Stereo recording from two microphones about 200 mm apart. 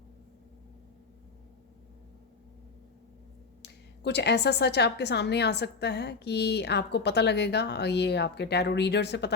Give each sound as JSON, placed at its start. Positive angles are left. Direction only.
{"t": 3.6, "sound": "a woman's voice", "side_deg": 60}